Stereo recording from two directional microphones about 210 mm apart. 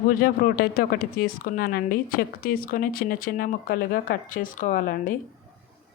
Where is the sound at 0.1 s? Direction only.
45° left (ahead or behind).